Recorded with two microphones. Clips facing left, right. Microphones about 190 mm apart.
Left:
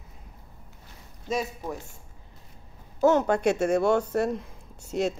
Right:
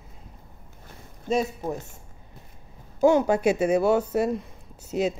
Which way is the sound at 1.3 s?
25° right (ahead or behind).